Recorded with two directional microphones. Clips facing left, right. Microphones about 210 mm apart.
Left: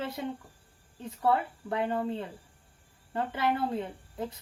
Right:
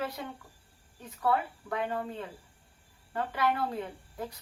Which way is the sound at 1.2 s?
30° left (ahead or behind).